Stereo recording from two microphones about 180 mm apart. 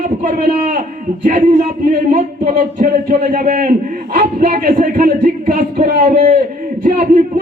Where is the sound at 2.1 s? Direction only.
45° right (ahead or behind).